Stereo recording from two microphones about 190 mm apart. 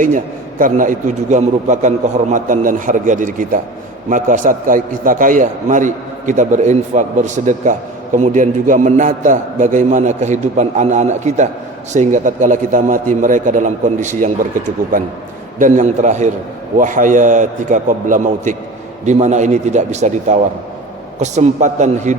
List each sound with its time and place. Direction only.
0.6 s a man's voice: 45° right (ahead or behind)